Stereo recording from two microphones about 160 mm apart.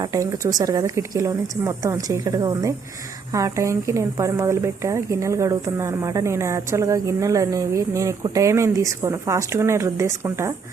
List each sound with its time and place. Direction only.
0.0 s speech: 20° right (ahead or behind)